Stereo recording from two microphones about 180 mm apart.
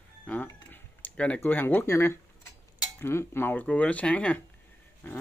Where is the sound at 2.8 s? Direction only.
15° left (ahead or behind).